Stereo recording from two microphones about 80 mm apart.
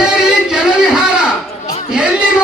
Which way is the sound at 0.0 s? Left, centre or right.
Centre.